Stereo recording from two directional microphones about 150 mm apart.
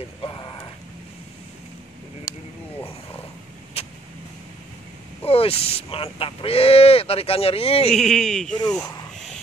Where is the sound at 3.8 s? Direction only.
40° left (ahead or behind).